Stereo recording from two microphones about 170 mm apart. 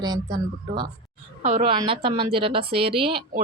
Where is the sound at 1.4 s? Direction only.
45° right (ahead or behind).